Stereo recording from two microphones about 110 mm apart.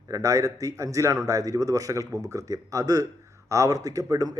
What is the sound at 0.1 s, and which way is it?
A man's voice, 30° right (ahead or behind).